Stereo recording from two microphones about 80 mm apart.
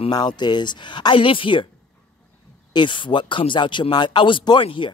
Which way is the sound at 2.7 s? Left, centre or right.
Left.